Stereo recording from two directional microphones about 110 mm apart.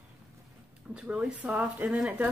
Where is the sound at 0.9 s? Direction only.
10° right (ahead or behind).